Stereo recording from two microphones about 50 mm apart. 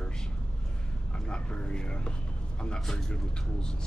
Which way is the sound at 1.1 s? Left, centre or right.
Centre.